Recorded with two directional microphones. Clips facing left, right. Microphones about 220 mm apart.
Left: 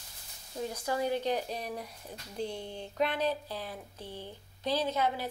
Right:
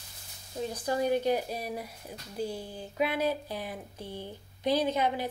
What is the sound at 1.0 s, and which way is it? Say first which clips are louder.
Speech: right 4 dB; 15° right (ahead or behind).